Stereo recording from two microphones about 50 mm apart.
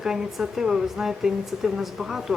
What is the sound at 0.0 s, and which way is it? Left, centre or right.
Speech, centre.